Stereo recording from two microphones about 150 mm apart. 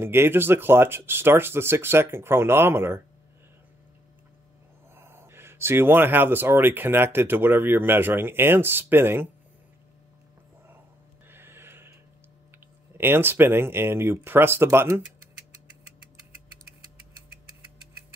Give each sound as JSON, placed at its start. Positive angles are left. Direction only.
{"t": 0.0, "sound": "speech", "side_deg": -15}
{"t": 4.9, "sound": "speech", "side_deg": -15}
{"t": 11.2, "sound": "a sound", "side_deg": -15}
{"t": 12.9, "sound": "speech", "side_deg": -15}